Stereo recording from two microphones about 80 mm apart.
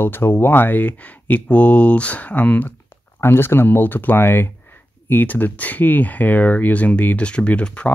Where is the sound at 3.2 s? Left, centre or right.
Left.